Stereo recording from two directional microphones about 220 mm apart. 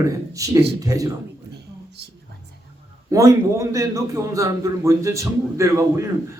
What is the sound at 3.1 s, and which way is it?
A man's voice, 15° right (ahead or behind).